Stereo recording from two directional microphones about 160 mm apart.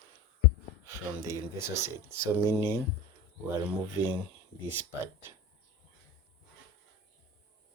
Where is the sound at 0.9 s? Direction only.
20° right (ahead or behind).